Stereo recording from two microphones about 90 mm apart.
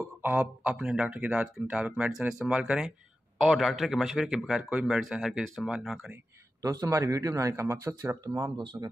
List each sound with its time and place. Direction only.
0.2 s speech: 15° right (ahead or behind)
6.6 s speech: 40° right (ahead or behind)